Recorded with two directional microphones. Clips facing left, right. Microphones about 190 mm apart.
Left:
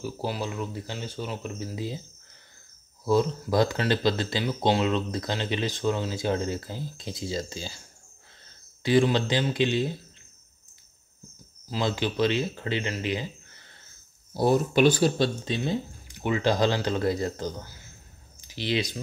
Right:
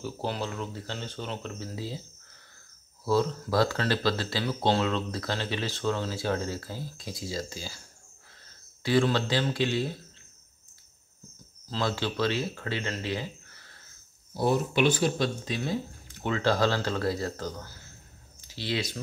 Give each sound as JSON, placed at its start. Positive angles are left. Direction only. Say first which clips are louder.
{"t": 0.0, "sound": "speech", "louder": "left 1 dB", "side_deg": 10}
{"t": 3.1, "sound": "speech", "louder": "left 2 dB", "side_deg": 15}
{"t": 8.8, "sound": "speech", "louder": "left 3 dB", "side_deg": 20}
{"t": 11.7, "sound": "speech", "louder": "left 2 dB", "side_deg": 15}
{"t": 14.3, "sound": "speech", "louder": "left 4 dB", "side_deg": 40}